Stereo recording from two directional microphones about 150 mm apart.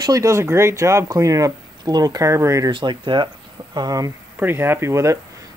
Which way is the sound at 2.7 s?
35° right (ahead or behind).